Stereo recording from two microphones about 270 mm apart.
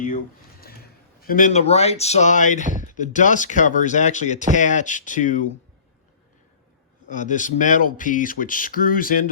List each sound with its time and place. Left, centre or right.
1.2 s speech: left
7.1 s speech: left